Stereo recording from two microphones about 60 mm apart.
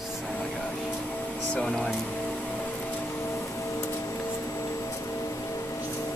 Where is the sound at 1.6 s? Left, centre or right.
Centre.